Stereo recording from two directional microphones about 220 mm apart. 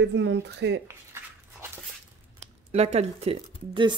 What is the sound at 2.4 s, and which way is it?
Speech, 30° right (ahead or behind).